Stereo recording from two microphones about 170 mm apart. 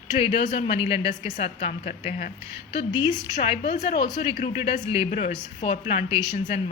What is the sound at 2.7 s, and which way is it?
A woman's voice, 30° left (ahead or behind).